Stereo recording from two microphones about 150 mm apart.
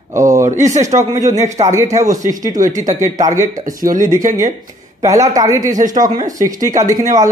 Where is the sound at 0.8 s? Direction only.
55° right (ahead or behind).